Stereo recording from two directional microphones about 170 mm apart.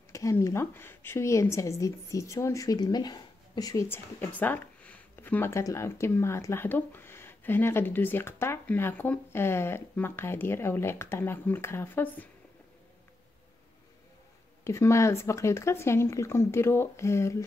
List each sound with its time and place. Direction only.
0.1 s speech: 20° left (ahead or behind)
14.6 s speech: 15° left (ahead or behind)